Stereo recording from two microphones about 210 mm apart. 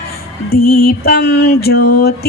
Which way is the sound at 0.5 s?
45° left (ahead or behind).